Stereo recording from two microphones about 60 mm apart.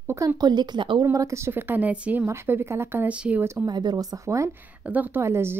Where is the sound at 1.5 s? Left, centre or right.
Right.